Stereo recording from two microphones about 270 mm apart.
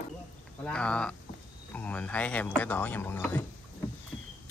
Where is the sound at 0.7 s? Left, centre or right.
Centre.